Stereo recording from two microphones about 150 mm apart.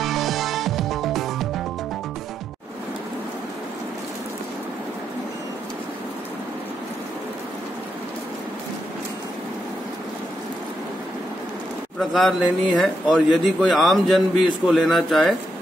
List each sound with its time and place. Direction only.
0.0 s music: centre (ahead or behind)
12.0 s a man's voice: centre (ahead or behind)